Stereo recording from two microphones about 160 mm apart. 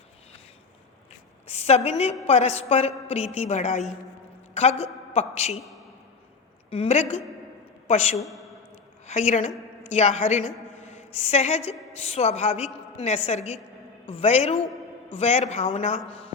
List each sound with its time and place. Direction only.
1.5 s a woman's voice: 40° left (ahead or behind)
6.7 s a woman's voice: 40° left (ahead or behind)
8.2 s a man's voice: centre (ahead or behind)
9.0 s a man's voice: 45° left (ahead or behind)